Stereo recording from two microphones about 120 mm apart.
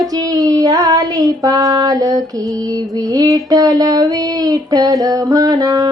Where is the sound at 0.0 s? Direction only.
30° right (ahead or behind).